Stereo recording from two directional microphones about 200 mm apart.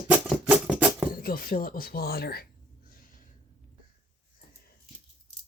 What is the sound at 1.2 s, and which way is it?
Speech, 45° left (ahead or behind).